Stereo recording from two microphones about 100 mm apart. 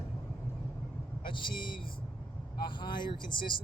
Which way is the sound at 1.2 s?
55° left (ahead or behind).